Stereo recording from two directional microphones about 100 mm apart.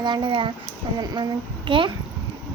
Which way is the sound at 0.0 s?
50° right (ahead or behind).